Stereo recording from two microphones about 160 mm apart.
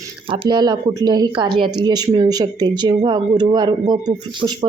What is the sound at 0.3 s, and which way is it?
Speech, 25° right (ahead or behind).